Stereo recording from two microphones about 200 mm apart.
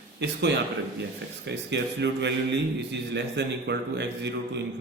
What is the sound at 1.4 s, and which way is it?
A man's voice, 60° right (ahead or behind).